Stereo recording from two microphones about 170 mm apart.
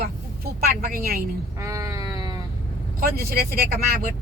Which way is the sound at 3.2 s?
60° right (ahead or behind).